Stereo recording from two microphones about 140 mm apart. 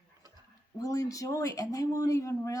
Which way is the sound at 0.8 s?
25° left (ahead or behind).